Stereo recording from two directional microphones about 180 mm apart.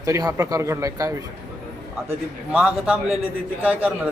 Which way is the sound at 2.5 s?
5° right (ahead or behind).